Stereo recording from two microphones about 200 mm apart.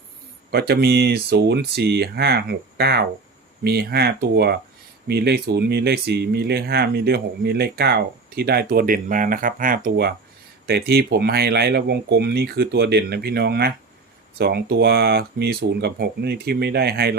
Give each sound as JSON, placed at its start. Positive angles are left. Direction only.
{"t": 0.5, "sound": "speech", "side_deg": -55}